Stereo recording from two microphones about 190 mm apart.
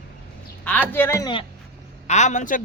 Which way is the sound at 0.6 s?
5° left (ahead or behind).